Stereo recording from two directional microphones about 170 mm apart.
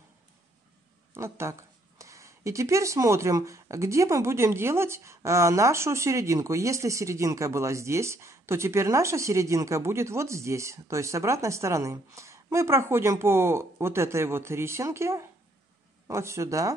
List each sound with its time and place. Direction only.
1.1 s speech: 15° right (ahead or behind)